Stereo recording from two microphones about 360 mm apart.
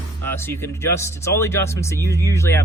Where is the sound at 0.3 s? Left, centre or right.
Centre.